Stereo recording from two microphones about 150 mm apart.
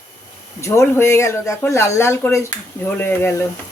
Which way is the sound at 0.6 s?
20° left (ahead or behind).